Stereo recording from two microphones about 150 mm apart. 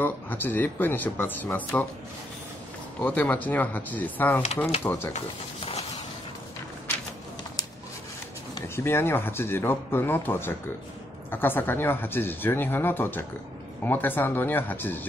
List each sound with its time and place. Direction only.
0.0 s speech: 15° left (ahead or behind)
3.0 s speech: 10° left (ahead or behind)
5.1 s a sound: 45° left (ahead or behind)
8.6 s speech: 15° left (ahead or behind)